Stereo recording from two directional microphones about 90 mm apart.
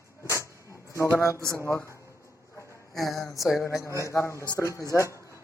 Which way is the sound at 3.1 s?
Centre (ahead or behind).